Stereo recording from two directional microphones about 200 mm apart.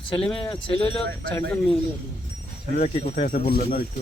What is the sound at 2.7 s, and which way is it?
Speech, 35° left (ahead or behind).